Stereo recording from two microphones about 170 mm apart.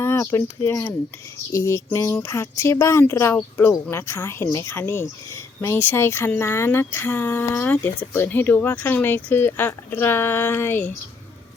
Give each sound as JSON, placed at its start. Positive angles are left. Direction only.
{"t": 0.0, "sound": "speech", "side_deg": 15}